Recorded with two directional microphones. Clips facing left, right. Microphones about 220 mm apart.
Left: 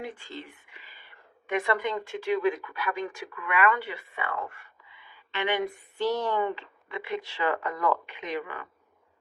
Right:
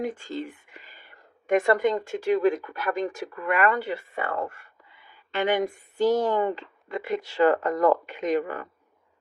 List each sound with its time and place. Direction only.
0.0 s speech: 45° right (ahead or behind)